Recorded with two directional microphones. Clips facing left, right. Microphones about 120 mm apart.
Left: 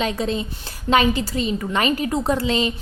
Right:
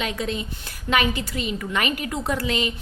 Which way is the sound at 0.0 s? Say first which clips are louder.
Left 4 dB; 35° left (ahead or behind).